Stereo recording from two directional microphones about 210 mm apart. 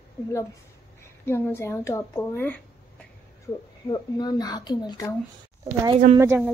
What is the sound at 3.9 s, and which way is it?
Speech, 20° left (ahead or behind).